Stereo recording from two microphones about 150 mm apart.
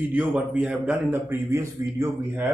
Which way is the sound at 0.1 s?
10° right (ahead or behind).